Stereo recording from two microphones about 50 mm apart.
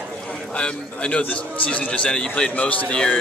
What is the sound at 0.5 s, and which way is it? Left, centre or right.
A man's voice, left.